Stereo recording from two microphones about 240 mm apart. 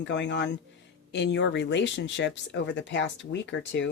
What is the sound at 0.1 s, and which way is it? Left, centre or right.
Speech, left.